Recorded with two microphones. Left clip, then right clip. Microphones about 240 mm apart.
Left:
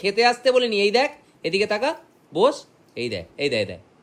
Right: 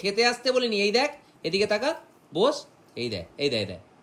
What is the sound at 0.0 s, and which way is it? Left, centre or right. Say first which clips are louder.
Speech: left 5 dB; centre.